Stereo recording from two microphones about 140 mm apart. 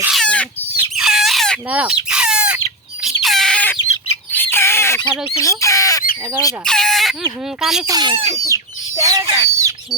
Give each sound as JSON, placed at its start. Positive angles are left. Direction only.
{"t": 0.1, "sound": "chicken", "side_deg": 5}
{"t": 0.9, "sound": "a sound", "side_deg": -5}
{"t": 1.8, "sound": "bird", "side_deg": -5}
{"t": 3.0, "sound": "a sound", "side_deg": 0}
{"t": 4.5, "sound": "bird", "side_deg": 15}
{"t": 5.4, "sound": "speech", "side_deg": 20}
{"t": 6.7, "sound": "speech", "side_deg": 5}
{"t": 7.9, "sound": "speech", "side_deg": -30}
{"t": 8.4, "sound": "chicken", "side_deg": -25}
{"t": 9.4, "sound": "bird", "side_deg": -20}